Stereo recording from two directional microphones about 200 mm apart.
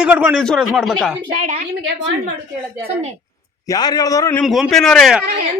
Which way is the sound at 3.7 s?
20° left (ahead or behind).